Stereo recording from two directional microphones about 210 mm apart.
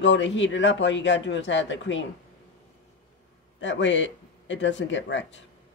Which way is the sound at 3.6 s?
60° left (ahead or behind).